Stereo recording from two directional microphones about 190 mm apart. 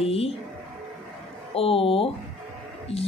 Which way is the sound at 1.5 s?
30° left (ahead or behind).